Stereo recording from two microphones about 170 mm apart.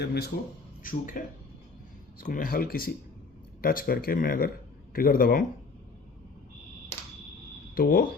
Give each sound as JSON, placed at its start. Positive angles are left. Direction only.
{"t": 0.0, "sound": "a man's voice", "side_deg": 75}
{"t": 0.8, "sound": "speech", "side_deg": 55}
{"t": 2.2, "sound": "speech", "side_deg": 55}
{"t": 7.8, "sound": "speech", "side_deg": 60}